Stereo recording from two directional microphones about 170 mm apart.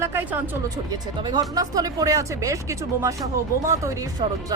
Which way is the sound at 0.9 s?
25° right (ahead or behind).